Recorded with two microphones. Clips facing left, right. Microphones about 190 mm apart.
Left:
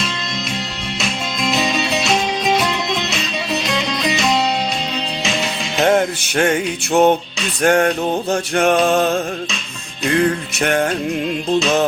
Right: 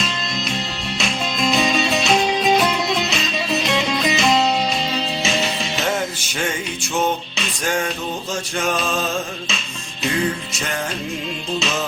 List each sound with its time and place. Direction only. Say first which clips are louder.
0.9 s music: right 1 dB; centre (ahead or behind)
5.8 s music: left 10 dB; 60° left (ahead or behind)